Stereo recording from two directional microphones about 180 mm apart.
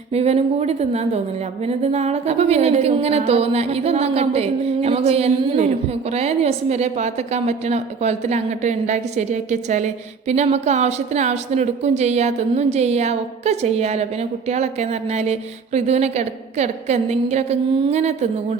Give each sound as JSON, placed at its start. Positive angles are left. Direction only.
{"t": 0.1, "sound": "a woman's voice", "side_deg": -35}